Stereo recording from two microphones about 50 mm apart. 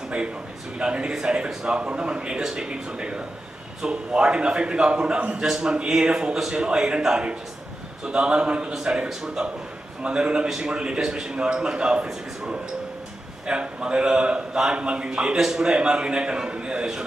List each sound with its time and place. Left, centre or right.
0.8 s a man's voice: centre
2.4 s a man's voice: centre
2.6 s a man's voice: right